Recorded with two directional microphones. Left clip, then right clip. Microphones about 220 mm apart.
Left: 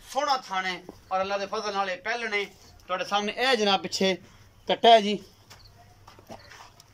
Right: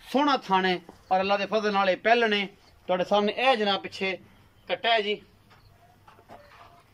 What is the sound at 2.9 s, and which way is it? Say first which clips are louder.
Speech: right 3 dB; 25° right (ahead or behind).